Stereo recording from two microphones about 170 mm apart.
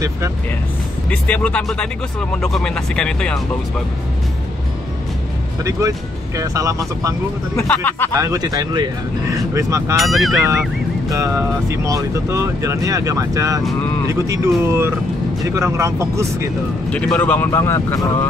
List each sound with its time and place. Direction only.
1.1 s speech: 5° left (ahead or behind)
5.6 s speech: 20° right (ahead or behind)
7.5 s speech: 10° left (ahead or behind)
8.1 s speech: 20° right (ahead or behind)
9.9 s speech: centre (ahead or behind)
11.1 s speech: 20° right (ahead or behind)
16.9 s speech: 10° left (ahead or behind)